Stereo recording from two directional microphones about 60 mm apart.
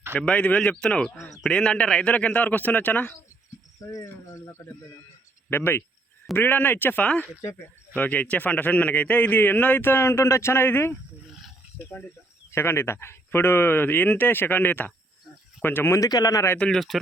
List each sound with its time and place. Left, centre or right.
0.1 s a man's voice: left
3.9 s speech: left
4.4 s speech: left
5.5 s a man's voice: left
11.9 s a man's voice: centre
12.5 s a man's voice: left
15.9 s a man's voice: left
16.7 s speech: centre